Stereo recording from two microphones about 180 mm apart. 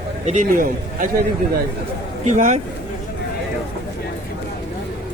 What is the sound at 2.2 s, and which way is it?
Speech, 40° right (ahead or behind).